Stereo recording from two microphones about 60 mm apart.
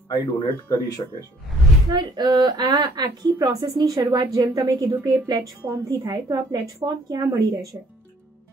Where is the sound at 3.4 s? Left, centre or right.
Right.